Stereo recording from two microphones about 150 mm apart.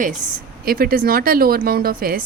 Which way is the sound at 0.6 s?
80° right.